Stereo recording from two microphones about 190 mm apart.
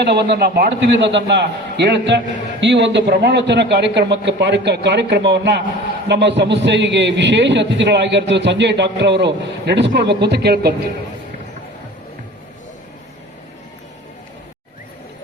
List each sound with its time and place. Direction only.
0.0 s a man's voice: 60° right (ahead or behind)